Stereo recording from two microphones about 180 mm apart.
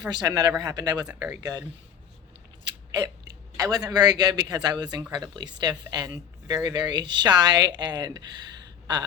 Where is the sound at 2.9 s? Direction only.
20° right (ahead or behind).